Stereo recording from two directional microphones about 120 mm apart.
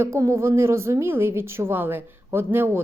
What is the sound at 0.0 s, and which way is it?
Speech, 25° right (ahead or behind).